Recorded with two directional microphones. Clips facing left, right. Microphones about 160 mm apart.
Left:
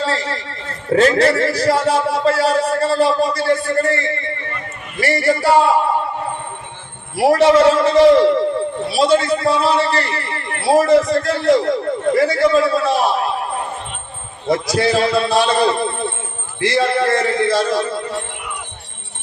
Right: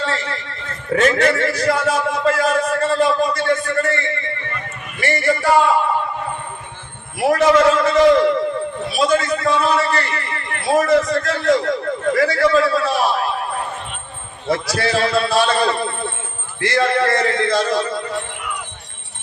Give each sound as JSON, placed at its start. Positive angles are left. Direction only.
{"t": 0.0, "sound": "a man's voice", "side_deg": 35}
{"t": 7.2, "sound": "a man's voice", "side_deg": 35}
{"t": 14.5, "sound": "a man's voice", "side_deg": 15}